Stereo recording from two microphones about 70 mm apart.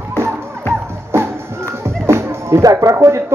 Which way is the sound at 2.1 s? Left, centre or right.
Right.